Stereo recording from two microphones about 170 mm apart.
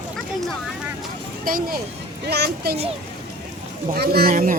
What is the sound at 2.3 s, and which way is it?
Speech, 70° right (ahead or behind).